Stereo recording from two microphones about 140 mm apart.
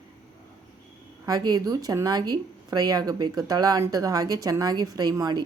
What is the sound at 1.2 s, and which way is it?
Speech, 30° right (ahead or behind).